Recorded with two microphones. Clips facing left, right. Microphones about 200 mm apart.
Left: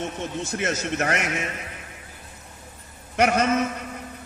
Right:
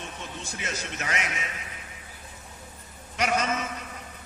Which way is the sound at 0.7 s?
55° left (ahead or behind).